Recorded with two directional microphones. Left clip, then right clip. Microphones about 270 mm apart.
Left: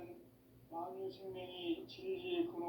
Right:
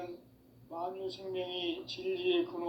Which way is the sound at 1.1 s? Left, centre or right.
Right.